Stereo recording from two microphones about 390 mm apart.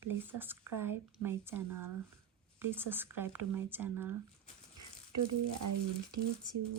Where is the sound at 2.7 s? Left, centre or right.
Centre.